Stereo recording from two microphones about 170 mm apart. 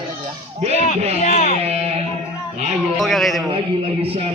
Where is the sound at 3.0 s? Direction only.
Centre (ahead or behind).